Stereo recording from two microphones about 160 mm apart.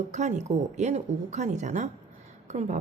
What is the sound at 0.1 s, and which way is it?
A woman's voice, 50° right (ahead or behind).